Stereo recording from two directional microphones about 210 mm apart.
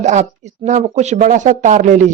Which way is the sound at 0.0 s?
35° right (ahead or behind).